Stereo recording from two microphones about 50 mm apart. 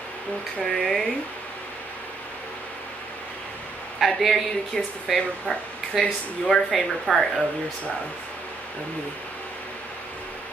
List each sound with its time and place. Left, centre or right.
0.6 s speech: centre
4.0 s speech: centre
4.7 s speech: centre